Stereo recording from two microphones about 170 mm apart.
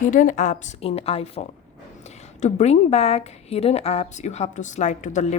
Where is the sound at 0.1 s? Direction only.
50° left (ahead or behind).